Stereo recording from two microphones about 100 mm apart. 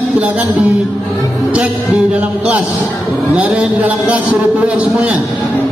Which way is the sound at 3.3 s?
15° right (ahead or behind).